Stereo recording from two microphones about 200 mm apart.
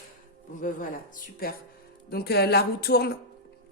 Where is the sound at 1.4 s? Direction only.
45° left (ahead or behind).